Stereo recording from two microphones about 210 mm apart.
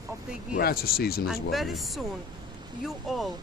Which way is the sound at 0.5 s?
45° left (ahead or behind).